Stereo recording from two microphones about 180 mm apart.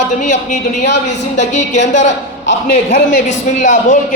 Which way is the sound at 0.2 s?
40° left (ahead or behind).